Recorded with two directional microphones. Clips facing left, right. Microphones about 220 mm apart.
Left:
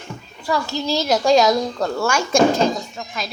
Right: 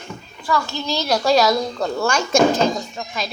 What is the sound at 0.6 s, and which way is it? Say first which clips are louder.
Speech: left 3 dB; 35° left (ahead or behind).